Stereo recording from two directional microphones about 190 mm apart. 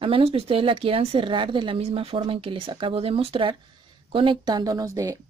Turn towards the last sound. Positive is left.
turn(degrees=-15)  # may be behind; listen again after turning